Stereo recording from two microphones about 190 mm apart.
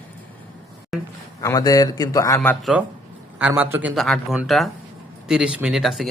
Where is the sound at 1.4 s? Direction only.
15° left (ahead or behind).